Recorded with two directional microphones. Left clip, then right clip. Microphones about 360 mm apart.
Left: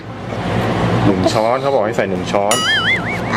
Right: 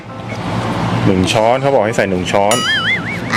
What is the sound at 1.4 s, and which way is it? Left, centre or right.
Speech, right.